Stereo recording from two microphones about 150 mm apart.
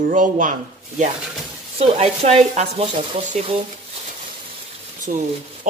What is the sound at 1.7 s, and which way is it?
Speech, 45° right (ahead or behind).